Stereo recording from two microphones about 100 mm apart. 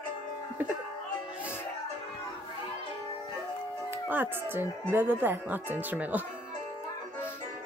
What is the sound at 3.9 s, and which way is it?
Speech, 20° right (ahead or behind).